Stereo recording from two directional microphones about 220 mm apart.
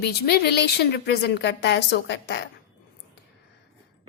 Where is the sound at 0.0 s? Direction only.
45° left (ahead or behind).